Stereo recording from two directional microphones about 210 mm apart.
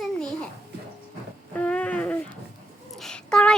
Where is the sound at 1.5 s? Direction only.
5° left (ahead or behind).